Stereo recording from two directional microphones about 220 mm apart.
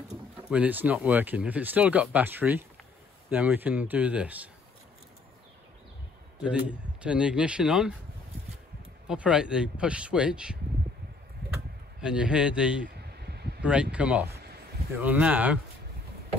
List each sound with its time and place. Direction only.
0.1 s speech: 5° right (ahead or behind)
6.4 s speech: 5° right (ahead or behind)
9.0 s speech: 5° right (ahead or behind)
12.0 s speech: 5° right (ahead or behind)
12.9 s a sound: 45° right (ahead or behind)
13.6 s speech: 5° right (ahead or behind)